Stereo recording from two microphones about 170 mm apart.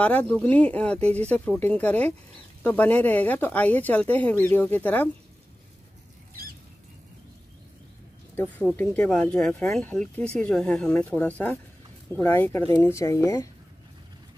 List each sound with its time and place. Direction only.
0.0 s speech: 10° left (ahead or behind)
8.4 s speech: 10° left (ahead or behind)